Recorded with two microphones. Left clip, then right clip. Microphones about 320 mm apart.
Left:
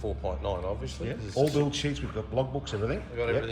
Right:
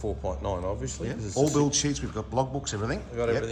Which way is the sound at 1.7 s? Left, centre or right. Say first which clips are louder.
Right 3 dB; centre.